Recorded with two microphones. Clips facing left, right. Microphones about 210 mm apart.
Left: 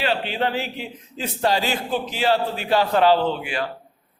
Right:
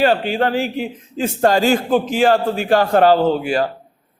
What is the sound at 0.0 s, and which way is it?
A man's voice, 45° right (ahead or behind).